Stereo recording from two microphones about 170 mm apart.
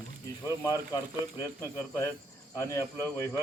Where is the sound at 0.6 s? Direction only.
20° left (ahead or behind).